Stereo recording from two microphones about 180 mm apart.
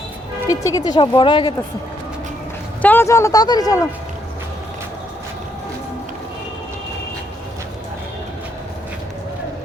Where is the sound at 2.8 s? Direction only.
10° left (ahead or behind).